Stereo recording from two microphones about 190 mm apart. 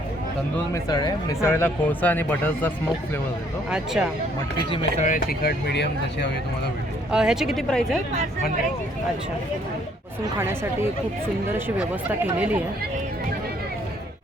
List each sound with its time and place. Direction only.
0.7 s speech: 20° left (ahead or behind)
3.7 s speech: 5° right (ahead or behind)
4.7 s speech: 40° left (ahead or behind); by 6.3 s 65° left (ahead or behind)
7.1 s speech: 5° right (ahead or behind)
10.3 s speech: 15° right (ahead or behind)